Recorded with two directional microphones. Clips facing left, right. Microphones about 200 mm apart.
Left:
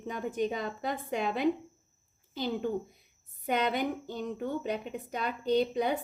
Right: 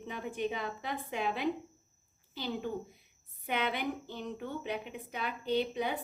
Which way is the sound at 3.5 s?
45° left (ahead or behind).